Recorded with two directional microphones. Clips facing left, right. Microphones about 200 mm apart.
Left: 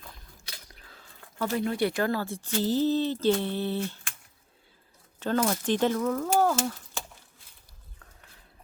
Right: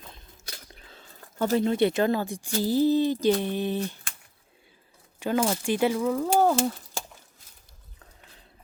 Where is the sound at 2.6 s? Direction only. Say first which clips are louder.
Right 3 dB; 10° right (ahead or behind).